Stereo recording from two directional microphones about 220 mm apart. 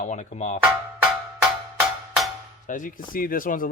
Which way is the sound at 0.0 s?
35° left (ahead or behind).